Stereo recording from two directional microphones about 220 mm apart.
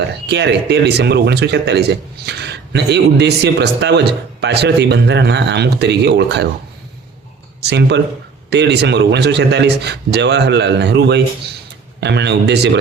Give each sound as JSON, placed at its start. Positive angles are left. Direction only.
{"t": 0.3, "sound": "a man's voice", "side_deg": -50}
{"t": 7.6, "sound": "a man's voice", "side_deg": -50}